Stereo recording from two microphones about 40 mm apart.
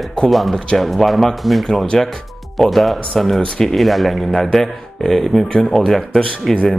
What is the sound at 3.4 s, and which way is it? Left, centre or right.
Speech, centre.